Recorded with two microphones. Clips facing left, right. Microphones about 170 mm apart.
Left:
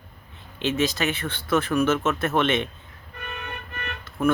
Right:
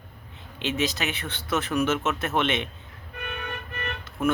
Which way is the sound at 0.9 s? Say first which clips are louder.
Left 4 dB; 20° right (ahead or behind).